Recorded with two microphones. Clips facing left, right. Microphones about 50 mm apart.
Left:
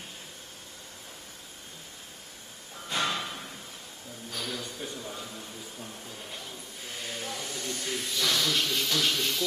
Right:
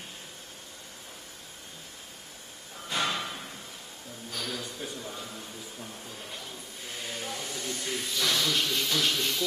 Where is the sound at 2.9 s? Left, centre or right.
Centre.